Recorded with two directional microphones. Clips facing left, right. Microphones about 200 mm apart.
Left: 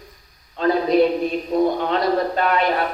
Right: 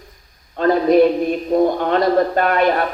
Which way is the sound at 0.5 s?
50° right (ahead or behind).